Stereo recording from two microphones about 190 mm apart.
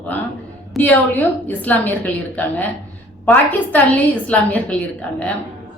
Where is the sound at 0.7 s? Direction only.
10° left (ahead or behind).